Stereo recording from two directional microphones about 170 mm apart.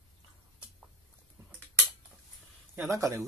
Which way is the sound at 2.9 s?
20° right (ahead or behind).